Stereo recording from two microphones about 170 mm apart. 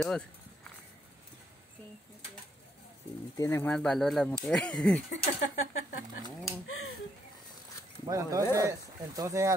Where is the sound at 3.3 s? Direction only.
15° left (ahead or behind).